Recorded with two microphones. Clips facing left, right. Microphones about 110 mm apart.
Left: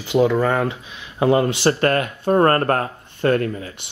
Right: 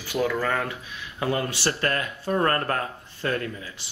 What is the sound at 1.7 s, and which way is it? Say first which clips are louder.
Speech: left 7 dB; 55° left (ahead or behind).